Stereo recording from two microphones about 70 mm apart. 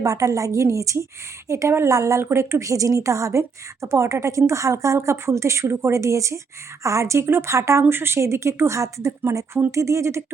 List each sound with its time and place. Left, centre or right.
0.0 s a woman's voice: right